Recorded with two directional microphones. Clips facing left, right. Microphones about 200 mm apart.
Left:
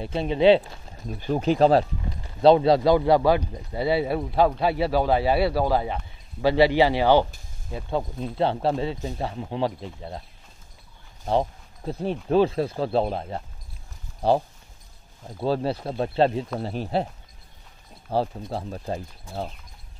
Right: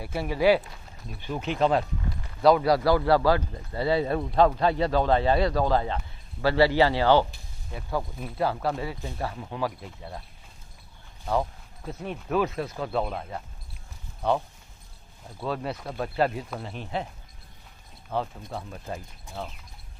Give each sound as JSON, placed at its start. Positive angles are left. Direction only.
{"t": 0.0, "sound": "speech", "side_deg": 25}
{"t": 0.9, "sound": "speech", "side_deg": 40}
{"t": 11.2, "sound": "speech", "side_deg": 30}
{"t": 18.1, "sound": "speech", "side_deg": 35}